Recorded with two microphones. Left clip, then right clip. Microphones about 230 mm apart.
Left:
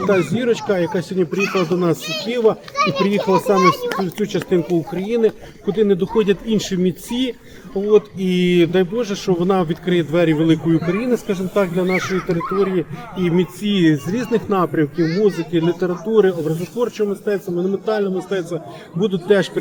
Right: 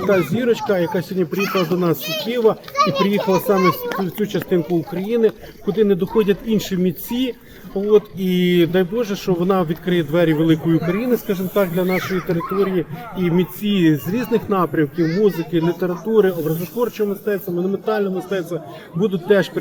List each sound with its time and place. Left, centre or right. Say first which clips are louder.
0.1 s speech: right 1 dB; centre
1.3 s speech: even; right
2.2 s speech: even; centre
2.7 s a child's voice: right 1 dB; centre
3.1 s speech: left 1 dB; centre
3.5 s a child's voice: left 3 dB; centre
4.0 s speech: left 1 dB; centre
14.9 s speech: even; left
15.5 s speech: left 1 dB; centre